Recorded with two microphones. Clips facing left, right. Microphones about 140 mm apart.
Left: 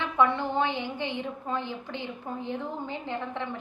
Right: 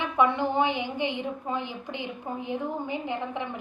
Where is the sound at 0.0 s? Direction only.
15° right (ahead or behind).